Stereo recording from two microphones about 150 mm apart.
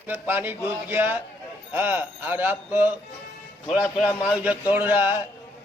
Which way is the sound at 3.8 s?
15° left (ahead or behind).